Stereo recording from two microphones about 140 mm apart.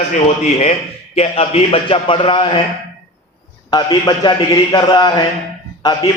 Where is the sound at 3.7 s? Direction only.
30° left (ahead or behind).